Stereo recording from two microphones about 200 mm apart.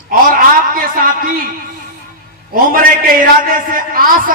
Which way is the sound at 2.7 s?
45° right (ahead or behind).